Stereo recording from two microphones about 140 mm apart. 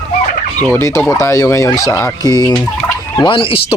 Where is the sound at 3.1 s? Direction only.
35° left (ahead or behind).